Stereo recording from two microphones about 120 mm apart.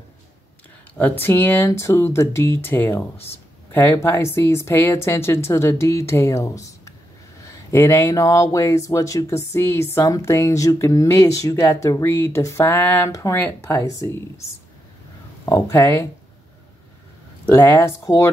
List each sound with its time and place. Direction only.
1.2 s speech: 15° left (ahead or behind)
4.0 s speech: 20° left (ahead or behind)
15.4 s speech: 25° left (ahead or behind)
17.6 s speech: 15° left (ahead or behind)